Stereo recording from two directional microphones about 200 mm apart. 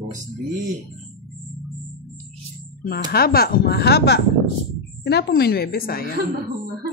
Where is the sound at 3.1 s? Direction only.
50° left (ahead or behind).